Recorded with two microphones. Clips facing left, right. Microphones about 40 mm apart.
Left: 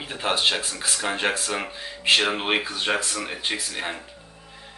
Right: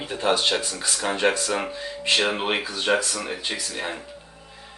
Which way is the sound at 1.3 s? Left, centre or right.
Left.